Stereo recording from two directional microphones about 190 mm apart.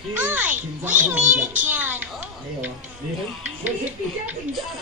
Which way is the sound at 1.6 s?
10° right (ahead or behind).